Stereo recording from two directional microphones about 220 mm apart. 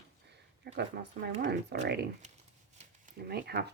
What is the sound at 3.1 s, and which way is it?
Speech, 45° right (ahead or behind).